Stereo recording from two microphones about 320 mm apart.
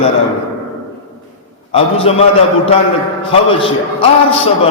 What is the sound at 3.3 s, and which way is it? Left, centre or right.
Speech, centre.